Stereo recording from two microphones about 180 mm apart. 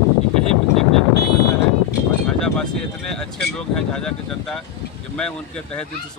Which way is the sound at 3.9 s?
5° left (ahead or behind).